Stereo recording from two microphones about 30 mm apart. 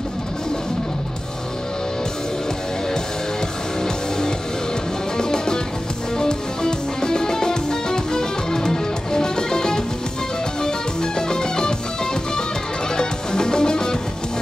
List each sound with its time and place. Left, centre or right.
5.1 s music: left
12.9 s music: left